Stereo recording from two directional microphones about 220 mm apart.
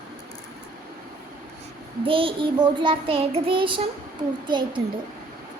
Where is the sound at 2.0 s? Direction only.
25° right (ahead or behind).